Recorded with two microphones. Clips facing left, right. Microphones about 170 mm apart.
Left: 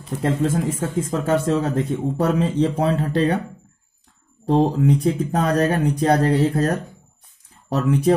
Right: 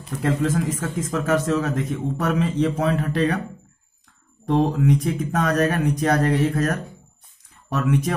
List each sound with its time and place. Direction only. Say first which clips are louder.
0.2 s speech: left 1 dB; 30° left (ahead or behind)
4.5 s speech: left 2 dB; 30° left (ahead or behind)